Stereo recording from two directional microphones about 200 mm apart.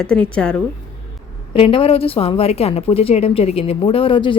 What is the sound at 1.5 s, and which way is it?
A woman's voice, 25° left (ahead or behind).